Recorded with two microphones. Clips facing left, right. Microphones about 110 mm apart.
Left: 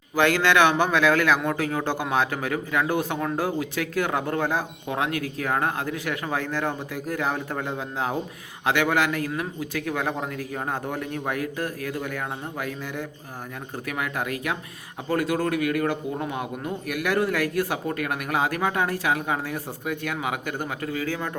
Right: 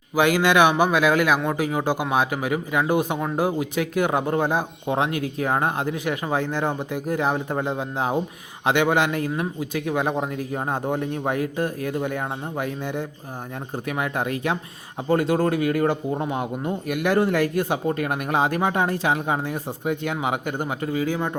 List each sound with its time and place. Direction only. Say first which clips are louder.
0.2 s speech: right 2 dB; 15° right (ahead or behind)